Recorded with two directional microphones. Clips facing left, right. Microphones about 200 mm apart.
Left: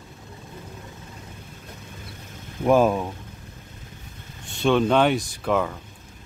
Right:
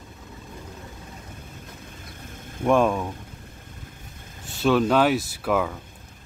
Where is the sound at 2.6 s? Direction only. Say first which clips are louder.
Left 2 dB; 5° left (ahead or behind).